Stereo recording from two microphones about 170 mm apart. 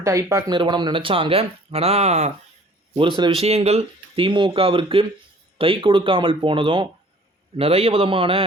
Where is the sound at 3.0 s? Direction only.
30° right (ahead or behind).